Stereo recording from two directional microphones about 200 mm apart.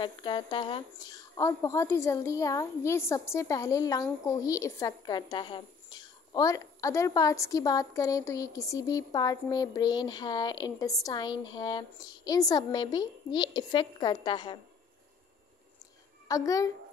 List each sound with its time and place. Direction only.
0.0 s a woman's voice: 25° left (ahead or behind)
16.3 s a woman's voice: 15° left (ahead or behind)